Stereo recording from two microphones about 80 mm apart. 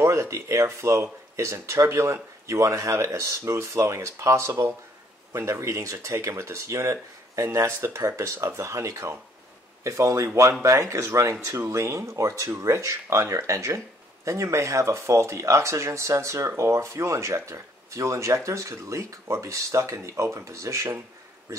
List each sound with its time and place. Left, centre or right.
0.0 s speech: right